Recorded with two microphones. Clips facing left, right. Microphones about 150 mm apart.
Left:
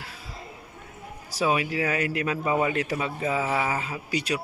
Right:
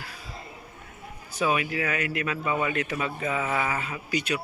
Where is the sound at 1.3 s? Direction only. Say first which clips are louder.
Left 1 dB; 30° left (ahead or behind).